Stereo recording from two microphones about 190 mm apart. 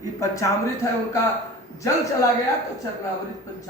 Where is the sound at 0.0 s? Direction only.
15° left (ahead or behind).